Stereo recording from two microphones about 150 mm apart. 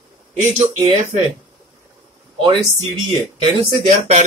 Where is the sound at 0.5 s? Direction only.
50° right (ahead or behind).